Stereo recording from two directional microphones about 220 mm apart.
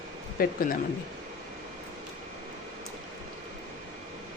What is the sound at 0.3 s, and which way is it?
Speech, 40° left (ahead or behind).